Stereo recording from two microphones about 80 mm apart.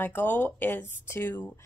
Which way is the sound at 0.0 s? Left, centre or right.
Left.